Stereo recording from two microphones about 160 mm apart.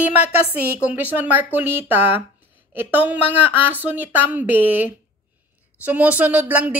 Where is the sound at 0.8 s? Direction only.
10° right (ahead or behind).